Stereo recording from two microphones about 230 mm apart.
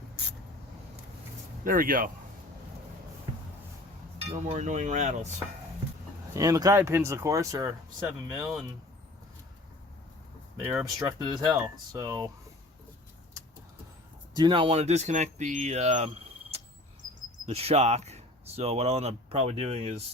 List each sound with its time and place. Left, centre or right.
1.6 s speech: right
4.3 s speech: right
6.3 s speech: centre
10.6 s speech: centre
14.3 s speech: right